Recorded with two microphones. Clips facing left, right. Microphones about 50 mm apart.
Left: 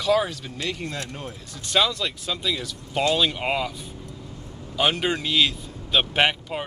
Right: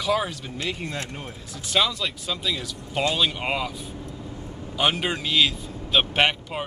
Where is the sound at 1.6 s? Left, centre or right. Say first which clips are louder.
Left 1 dB; centre.